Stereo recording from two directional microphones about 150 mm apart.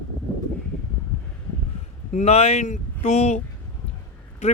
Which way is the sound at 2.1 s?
45° left (ahead or behind).